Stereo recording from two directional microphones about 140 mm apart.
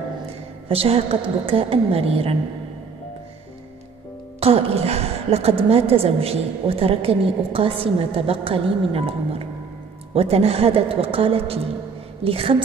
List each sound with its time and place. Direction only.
0.7 s a woman's voice: 45° right (ahead or behind)
4.4 s a woman's voice: 45° right (ahead or behind)